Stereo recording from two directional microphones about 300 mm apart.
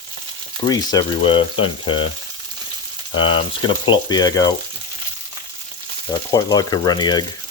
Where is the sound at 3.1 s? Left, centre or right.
Centre.